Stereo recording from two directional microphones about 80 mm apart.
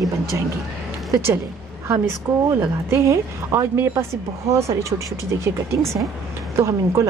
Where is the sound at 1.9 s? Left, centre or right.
Right.